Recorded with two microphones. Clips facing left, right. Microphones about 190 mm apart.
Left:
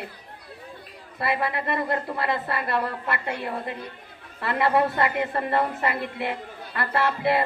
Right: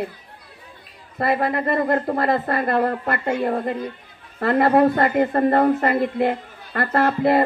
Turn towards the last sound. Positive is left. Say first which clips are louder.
# right 5 dB
turn(degrees=-45)  # may be behind; listen again after turning